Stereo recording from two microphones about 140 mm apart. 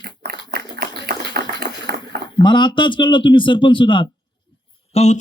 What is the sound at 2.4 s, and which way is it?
Speech, 35° left (ahead or behind).